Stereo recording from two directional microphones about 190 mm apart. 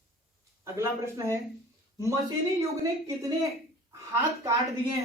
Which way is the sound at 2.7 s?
15° right (ahead or behind).